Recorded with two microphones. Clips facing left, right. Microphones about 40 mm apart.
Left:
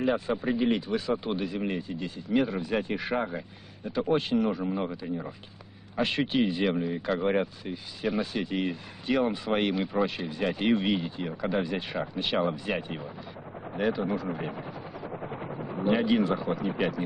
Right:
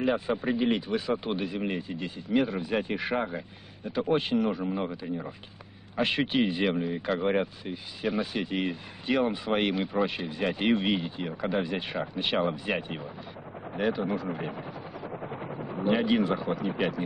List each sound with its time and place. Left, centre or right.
0.0 s speech: centre
6.0 s speech: centre
13.7 s helicopter: centre
16.3 s speech: centre